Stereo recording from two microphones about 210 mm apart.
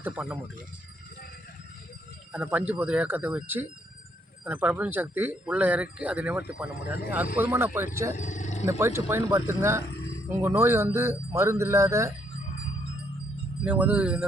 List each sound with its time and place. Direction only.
0.0 s speech: 5° right (ahead or behind)
2.3 s speech: 5° right (ahead or behind)
8.1 s roaring cats: 35° left (ahead or behind)
8.8 s speech: 10° right (ahead or behind)
13.7 s speech: 5° right (ahead or behind)